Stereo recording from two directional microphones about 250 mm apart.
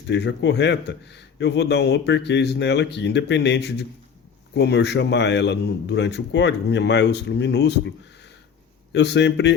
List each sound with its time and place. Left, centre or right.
0.1 s speech: left